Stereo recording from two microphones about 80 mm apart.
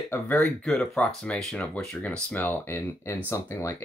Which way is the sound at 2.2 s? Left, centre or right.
Left.